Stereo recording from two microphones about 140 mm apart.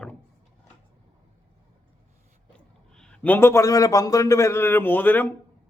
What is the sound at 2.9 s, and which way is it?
A man's voice, 5° left (ahead or behind).